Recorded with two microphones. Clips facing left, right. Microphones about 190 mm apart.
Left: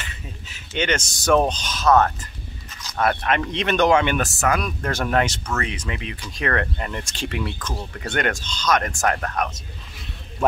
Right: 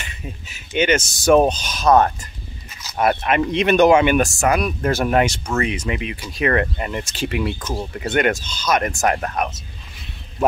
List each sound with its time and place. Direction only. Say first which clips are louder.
0.0 s speech: right 4 dB; 10° right (ahead or behind)
8.0 s speech: right 5 dB; 10° right (ahead or behind)